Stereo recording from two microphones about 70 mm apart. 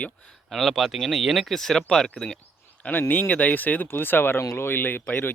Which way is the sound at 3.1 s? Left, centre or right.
Left.